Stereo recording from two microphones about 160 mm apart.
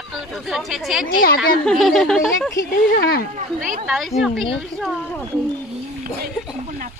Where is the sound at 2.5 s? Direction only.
75° left (ahead or behind).